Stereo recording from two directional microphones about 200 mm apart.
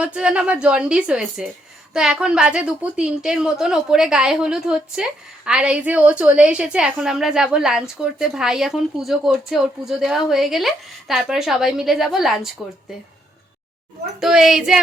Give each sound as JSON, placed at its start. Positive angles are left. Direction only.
{"t": 0.0, "sound": "a woman's voice", "side_deg": -5}
{"t": 14.2, "sound": "a woman's voice", "side_deg": 0}